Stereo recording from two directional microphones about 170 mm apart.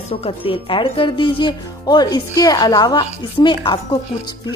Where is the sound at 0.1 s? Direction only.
35° left (ahead or behind).